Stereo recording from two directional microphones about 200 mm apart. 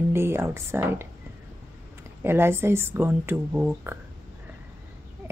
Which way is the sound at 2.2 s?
10° right (ahead or behind).